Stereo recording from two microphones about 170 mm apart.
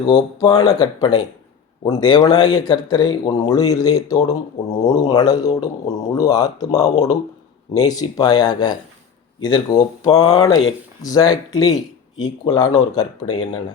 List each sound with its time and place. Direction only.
0.1 s speech: 25° left (ahead or behind)